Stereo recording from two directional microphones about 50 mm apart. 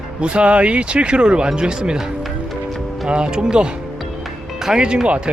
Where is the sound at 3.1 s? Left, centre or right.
Centre.